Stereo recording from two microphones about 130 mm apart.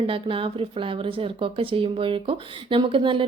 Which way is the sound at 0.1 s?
40° right (ahead or behind).